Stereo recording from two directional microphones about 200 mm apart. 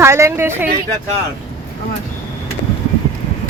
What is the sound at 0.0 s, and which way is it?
Speech, 15° right (ahead or behind).